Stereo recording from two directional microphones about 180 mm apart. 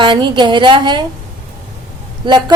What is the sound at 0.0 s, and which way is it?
A woman's voice, 25° right (ahead or behind).